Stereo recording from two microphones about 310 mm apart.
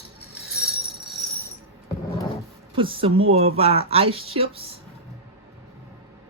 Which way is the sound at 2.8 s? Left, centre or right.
Centre.